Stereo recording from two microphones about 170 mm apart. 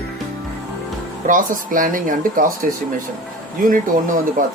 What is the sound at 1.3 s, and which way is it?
Speech, 50° right (ahead or behind).